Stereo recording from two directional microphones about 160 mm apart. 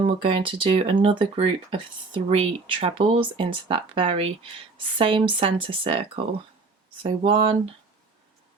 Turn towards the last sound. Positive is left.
turn(degrees=-35)  # may be behind; listen again after turning